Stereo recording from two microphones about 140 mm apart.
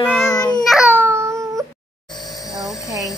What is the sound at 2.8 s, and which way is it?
Music, 25° left (ahead or behind).